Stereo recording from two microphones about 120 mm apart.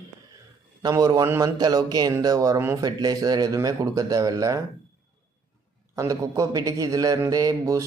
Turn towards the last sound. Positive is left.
turn(degrees=-30)  # may be behind; listen again after turning